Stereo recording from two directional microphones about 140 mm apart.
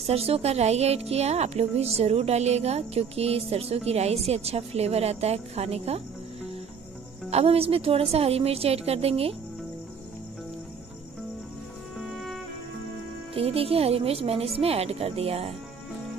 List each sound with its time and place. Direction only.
0.0 s a woman's voice: 45° right (ahead or behind)
7.2 s a woman's voice: 45° right (ahead or behind)
12.0 s music: centre (ahead or behind)
13.3 s a woman's voice: 45° right (ahead or behind)